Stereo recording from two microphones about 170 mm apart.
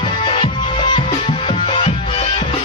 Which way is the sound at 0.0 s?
30° left (ahead or behind).